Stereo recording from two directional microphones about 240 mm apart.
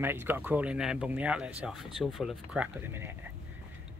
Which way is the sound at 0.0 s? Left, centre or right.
Centre.